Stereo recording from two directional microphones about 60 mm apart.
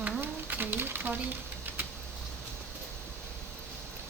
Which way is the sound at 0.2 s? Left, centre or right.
Right.